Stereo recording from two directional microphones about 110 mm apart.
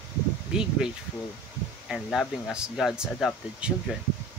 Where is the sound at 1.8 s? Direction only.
Centre (ahead or behind).